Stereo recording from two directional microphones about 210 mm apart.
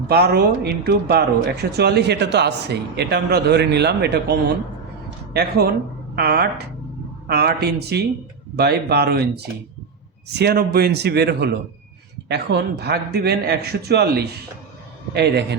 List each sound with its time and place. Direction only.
0.1 s speech: 50° right (ahead or behind)